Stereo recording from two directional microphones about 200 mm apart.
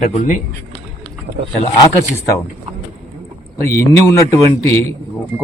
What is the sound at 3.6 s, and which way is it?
Speech, 15° left (ahead or behind).